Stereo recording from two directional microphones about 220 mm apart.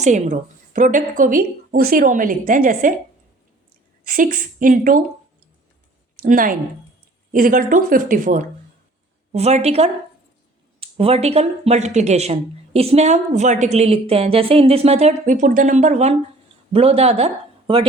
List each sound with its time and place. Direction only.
0.0 s a woman's voice: 30° right (ahead or behind)
4.0 s a woman's voice: 40° right (ahead or behind)
6.2 s a woman's voice: 40° right (ahead or behind)